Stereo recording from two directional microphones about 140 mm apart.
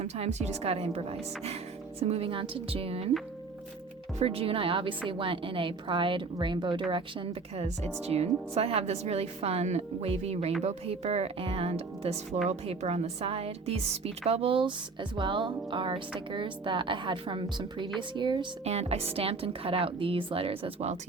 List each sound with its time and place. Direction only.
0.0 s speech: 50° right (ahead or behind)
4.2 s speech: 40° right (ahead or behind)
18.6 s speech: 50° right (ahead or behind)